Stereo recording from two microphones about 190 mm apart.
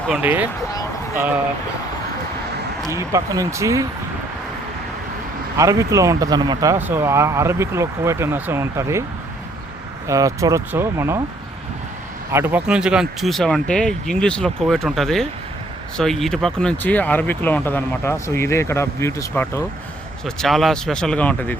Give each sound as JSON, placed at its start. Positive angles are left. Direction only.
{"t": 0.1, "sound": "speech", "side_deg": -10}
{"t": 2.9, "sound": "speech", "side_deg": -15}
{"t": 5.5, "sound": "speech", "side_deg": -15}
{"t": 10.1, "sound": "speech", "side_deg": -15}
{"t": 12.3, "sound": "speech", "side_deg": -10}
{"t": 20.2, "sound": "speech", "side_deg": 0}